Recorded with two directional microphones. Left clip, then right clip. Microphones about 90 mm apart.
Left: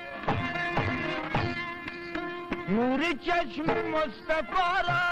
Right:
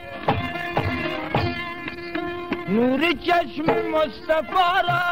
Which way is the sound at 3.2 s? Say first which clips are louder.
Right 7 dB; 30° right (ahead or behind).